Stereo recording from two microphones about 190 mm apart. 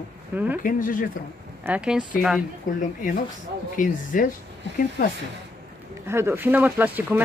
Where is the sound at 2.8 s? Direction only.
45° left (ahead or behind).